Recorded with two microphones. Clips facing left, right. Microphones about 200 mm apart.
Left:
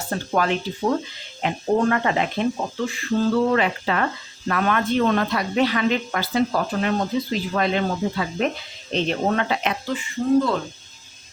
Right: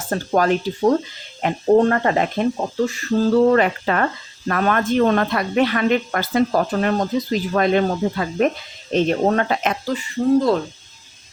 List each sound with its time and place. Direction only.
0.1 s speech: 40° right (ahead or behind)